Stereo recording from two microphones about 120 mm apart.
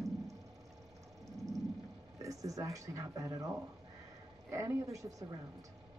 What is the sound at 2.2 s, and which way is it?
Speech, 30° right (ahead or behind).